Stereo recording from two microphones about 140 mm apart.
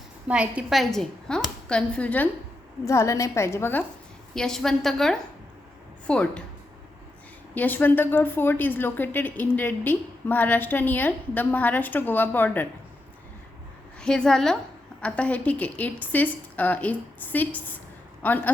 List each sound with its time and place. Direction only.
0.3 s a woman's voice: 10° right (ahead or behind); by 2.3 s 10° left (ahead or behind)
2.8 s a woman's voice: 20° left (ahead or behind)
4.4 s a woman's voice: 5° left (ahead or behind)
7.5 s a woman's voice: 15° left (ahead or behind)
14.0 s a woman's voice: 5° left (ahead or behind)